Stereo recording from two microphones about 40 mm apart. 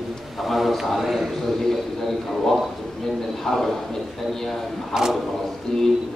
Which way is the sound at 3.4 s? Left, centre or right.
Centre.